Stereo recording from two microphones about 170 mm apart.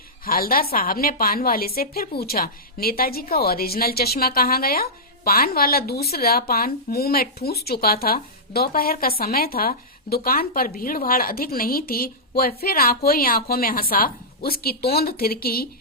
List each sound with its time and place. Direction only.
0.3 s a woman's voice: 60° left (ahead or behind)